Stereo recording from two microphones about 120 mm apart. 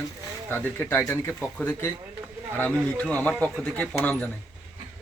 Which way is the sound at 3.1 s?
10° left (ahead or behind).